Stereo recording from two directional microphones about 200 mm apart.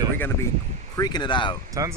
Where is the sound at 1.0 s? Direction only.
20° left (ahead or behind).